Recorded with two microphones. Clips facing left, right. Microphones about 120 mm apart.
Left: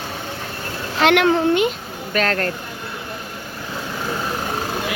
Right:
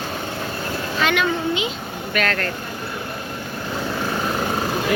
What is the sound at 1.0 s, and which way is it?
Speech, 70° left (ahead or behind).